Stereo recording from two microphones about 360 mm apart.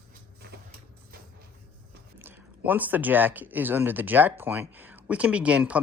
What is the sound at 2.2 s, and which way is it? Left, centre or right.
Speech, centre.